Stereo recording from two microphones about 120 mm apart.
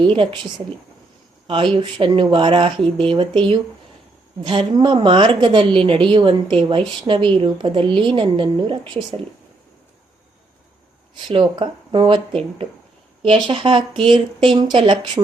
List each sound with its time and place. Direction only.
0.0 s a woman's voice: 45° right (ahead or behind)
1.5 s a woman's voice: 45° right (ahead or behind)
11.3 s a woman's voice: 40° right (ahead or behind)